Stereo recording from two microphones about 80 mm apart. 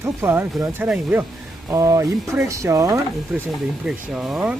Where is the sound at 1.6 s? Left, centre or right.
Right.